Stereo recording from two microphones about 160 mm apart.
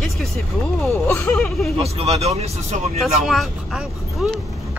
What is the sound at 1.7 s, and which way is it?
Speech, 40° right (ahead or behind).